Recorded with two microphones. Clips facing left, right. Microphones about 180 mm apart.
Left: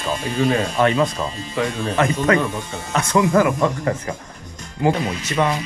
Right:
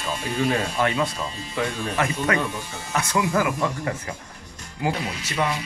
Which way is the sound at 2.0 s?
35° left (ahead or behind).